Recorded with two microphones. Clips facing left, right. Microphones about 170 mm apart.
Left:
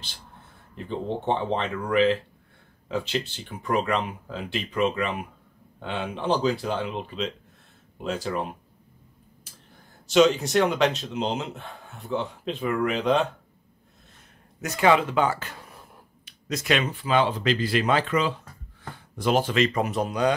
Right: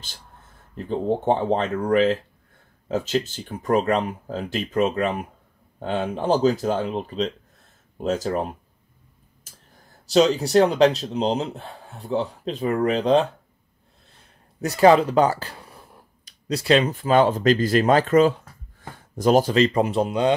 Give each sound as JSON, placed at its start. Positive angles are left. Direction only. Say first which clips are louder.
{"t": 0.7, "sound": "speech", "louder": "right 6 dB", "side_deg": -40}
{"t": 10.0, "sound": "speech", "louder": "right 1 dB", "side_deg": -35}
{"t": 14.6, "sound": "speech", "louder": "right 6 dB", "side_deg": -35}